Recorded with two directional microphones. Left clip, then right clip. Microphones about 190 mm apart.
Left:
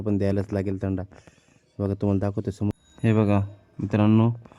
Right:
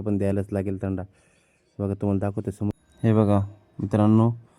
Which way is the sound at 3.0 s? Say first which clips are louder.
Right 1 dB; 15° right (ahead or behind).